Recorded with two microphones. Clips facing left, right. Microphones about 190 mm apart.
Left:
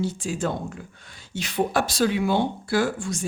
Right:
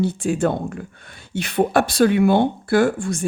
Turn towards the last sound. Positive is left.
turn(degrees=-55)  # may be behind; listen again after turning